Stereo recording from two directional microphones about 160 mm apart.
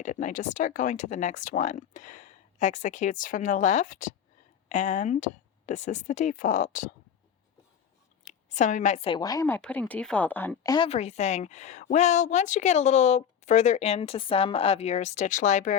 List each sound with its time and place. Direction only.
0.0 s a woman's voice: 50° left (ahead or behind)
8.2 s a sound: 45° left (ahead or behind)
9.0 s speech: 25° left (ahead or behind)
9.5 s speech: 10° left (ahead or behind)
10.8 s a woman's voice: 40° left (ahead or behind)